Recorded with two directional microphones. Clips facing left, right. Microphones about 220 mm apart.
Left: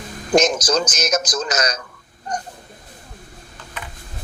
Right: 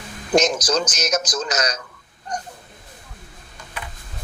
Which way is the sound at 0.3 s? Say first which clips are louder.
Left 2 dB; 50° left (ahead or behind).